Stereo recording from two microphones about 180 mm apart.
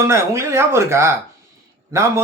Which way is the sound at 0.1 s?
15° right (ahead or behind).